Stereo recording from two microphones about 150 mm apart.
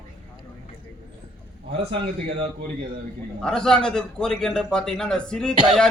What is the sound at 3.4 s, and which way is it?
A man's voice, 5° left (ahead or behind).